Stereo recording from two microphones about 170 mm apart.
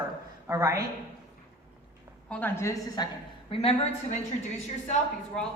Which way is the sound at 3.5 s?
35° left (ahead or behind).